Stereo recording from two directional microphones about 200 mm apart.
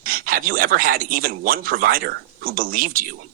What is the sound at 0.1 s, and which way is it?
Speech, 45° right (ahead or behind).